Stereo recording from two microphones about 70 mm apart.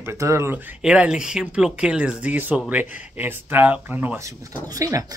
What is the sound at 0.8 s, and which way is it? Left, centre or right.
Speech, centre.